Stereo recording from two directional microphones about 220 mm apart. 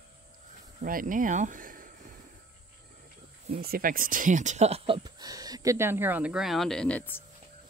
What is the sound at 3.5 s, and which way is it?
Speech, 40° right (ahead or behind).